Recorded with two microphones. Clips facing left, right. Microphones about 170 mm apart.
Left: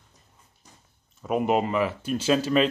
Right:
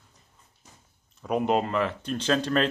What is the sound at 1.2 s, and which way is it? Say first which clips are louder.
Speech: left 1 dB; 5° left (ahead or behind).